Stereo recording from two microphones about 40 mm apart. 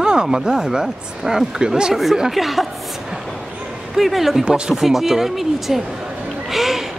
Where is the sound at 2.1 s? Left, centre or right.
Centre.